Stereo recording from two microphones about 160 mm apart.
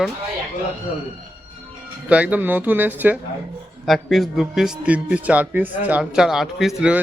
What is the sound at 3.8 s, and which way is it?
A man's voice, centre (ahead or behind).